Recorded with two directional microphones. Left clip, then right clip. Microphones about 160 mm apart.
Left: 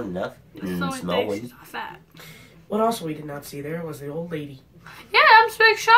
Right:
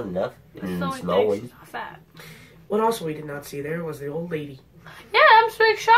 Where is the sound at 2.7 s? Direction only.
25° right (ahead or behind).